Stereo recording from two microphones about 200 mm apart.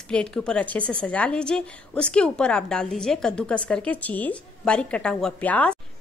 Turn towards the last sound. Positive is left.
turn(degrees=5)  # may be behind; listen again after turning